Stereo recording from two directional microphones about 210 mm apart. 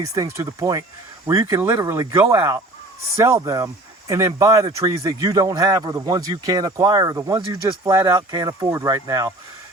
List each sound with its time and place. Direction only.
0.0 s speech: 15° right (ahead or behind)